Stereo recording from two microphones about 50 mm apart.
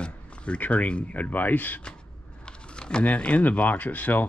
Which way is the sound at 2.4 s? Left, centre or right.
Centre.